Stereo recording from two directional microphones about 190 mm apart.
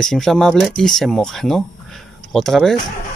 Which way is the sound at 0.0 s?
Centre (ahead or behind).